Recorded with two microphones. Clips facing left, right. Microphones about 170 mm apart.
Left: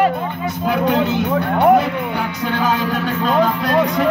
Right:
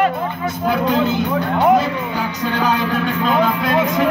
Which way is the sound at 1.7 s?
65° left (ahead or behind).